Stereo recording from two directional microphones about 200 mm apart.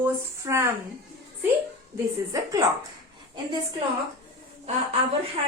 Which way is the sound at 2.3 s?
15° right (ahead or behind).